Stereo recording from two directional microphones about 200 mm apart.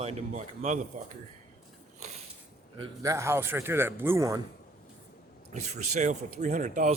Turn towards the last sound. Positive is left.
turn(degrees=-40)  # may be behind; listen again after turning